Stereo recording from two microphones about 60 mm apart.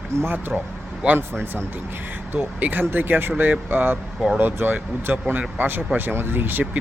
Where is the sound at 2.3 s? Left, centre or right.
Right.